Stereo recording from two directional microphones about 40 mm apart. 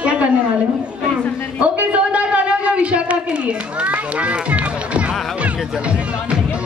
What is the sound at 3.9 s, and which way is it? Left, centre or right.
Music, right.